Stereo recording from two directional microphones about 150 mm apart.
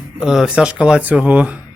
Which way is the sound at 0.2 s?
5° right (ahead or behind).